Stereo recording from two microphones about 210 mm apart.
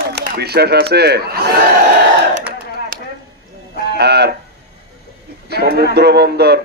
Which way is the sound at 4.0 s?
50° right (ahead or behind).